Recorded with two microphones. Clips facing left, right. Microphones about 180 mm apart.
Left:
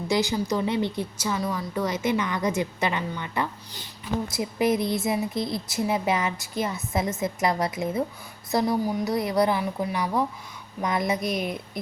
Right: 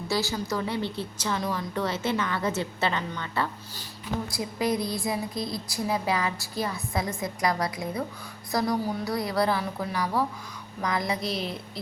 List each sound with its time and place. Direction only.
0.1 s a woman's voice: 15° left (ahead or behind)